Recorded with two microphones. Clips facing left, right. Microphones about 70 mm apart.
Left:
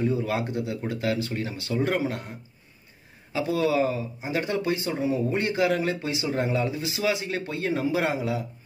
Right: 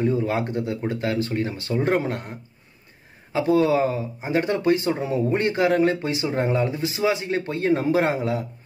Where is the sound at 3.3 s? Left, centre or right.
Right.